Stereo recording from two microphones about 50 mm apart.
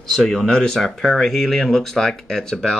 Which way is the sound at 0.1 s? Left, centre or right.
Centre.